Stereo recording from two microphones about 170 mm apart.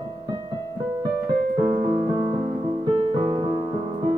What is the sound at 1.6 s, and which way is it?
Music, 25° right (ahead or behind).